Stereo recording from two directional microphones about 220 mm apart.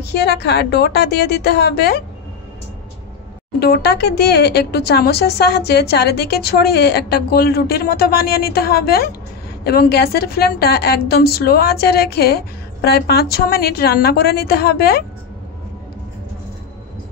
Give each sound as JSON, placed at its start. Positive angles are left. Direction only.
{"t": 0.0, "sound": "speech", "side_deg": 50}
{"t": 3.5, "sound": "speech", "side_deg": 45}